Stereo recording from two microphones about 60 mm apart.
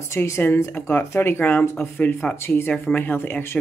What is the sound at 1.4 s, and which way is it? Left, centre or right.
Speech, left.